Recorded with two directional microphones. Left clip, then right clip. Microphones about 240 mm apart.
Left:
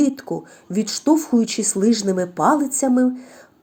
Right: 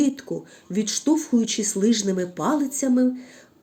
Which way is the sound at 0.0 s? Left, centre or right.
Centre.